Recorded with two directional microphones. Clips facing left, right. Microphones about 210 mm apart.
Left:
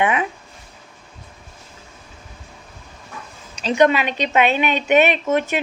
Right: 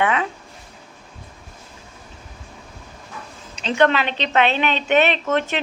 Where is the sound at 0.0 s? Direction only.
15° left (ahead or behind).